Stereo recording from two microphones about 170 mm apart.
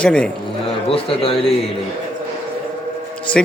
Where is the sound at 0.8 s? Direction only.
35° left (ahead or behind).